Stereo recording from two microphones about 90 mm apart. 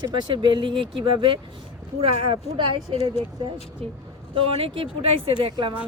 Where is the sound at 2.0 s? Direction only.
90° right; by 2.7 s 75° right (ahead or behind).